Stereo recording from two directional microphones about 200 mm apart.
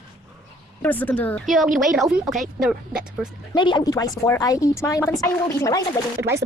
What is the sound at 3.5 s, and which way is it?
Speech, 20° left (ahead or behind).